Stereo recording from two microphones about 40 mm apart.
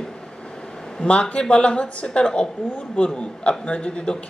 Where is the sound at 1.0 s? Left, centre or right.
Left.